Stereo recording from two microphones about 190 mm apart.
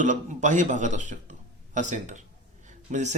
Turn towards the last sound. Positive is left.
turn(degrees=-40)  # may be behind; listen again after turning